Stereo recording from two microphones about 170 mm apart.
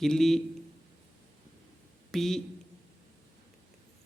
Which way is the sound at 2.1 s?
Centre (ahead or behind).